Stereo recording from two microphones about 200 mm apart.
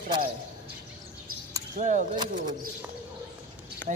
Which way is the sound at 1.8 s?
40° right (ahead or behind).